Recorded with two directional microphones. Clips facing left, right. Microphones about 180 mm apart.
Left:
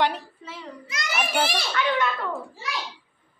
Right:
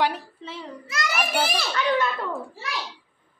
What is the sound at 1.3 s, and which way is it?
Speech, centre (ahead or behind).